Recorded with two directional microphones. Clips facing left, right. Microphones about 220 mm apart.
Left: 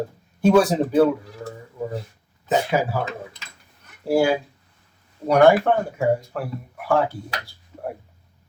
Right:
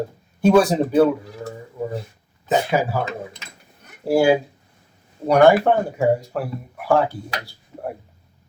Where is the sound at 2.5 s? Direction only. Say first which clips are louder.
Right 1 dB; 45° right (ahead or behind).